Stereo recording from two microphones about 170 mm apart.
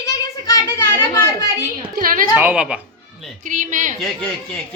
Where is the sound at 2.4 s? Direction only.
10° right (ahead or behind).